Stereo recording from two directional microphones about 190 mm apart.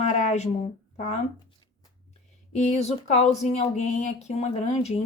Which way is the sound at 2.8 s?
35° left (ahead or behind).